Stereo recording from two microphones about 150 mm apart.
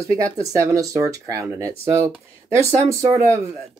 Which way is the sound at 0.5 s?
20° right (ahead or behind).